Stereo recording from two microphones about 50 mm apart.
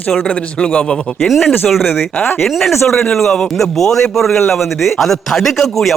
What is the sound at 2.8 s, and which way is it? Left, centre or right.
A man's voice, centre.